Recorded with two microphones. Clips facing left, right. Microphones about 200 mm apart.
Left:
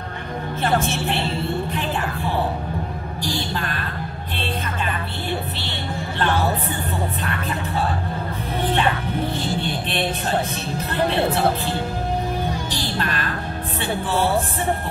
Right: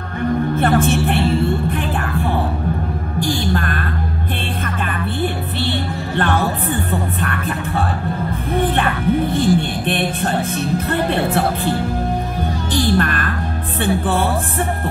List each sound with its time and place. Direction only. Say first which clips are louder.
0.6 s a woman's voice: right 3 dB; 50° right (ahead or behind)
3.2 s music: right 7 dB; 55° right (ahead or behind)
6.9 s music: right 4 dB; 50° right (ahead or behind)
9.3 s music: right 8 dB; 50° right (ahead or behind)
12.9 s music: right 7 dB; 55° right (ahead or behind)